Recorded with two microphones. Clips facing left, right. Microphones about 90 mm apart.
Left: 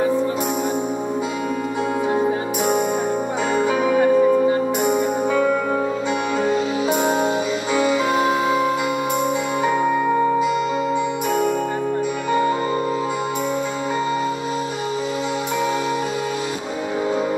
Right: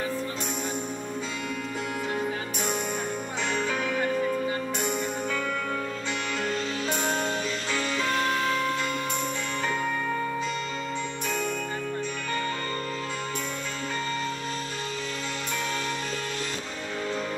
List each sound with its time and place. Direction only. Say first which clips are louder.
3.5 s music: left 11 dB; 15° left (ahead or behind)
12.3 s music: left 13 dB; 15° left (ahead or behind)